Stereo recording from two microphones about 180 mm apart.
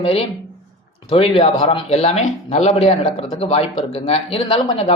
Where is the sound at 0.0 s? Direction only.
30° left (ahead or behind).